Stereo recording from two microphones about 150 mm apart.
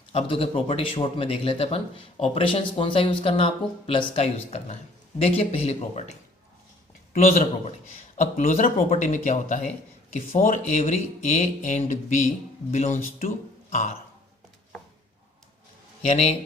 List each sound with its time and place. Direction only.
0.1 s speech: 40° left (ahead or behind); by 13.3 s 60° left (ahead or behind)
13.7 s a sound: 45° left (ahead or behind)
16.0 s speech: 45° left (ahead or behind)